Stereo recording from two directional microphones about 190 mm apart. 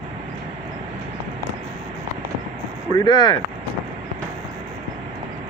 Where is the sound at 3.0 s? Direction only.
20° left (ahead or behind).